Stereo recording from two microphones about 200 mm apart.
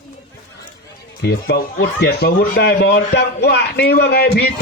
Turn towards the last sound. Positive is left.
turn(degrees=50)  # may be behind; listen again after turning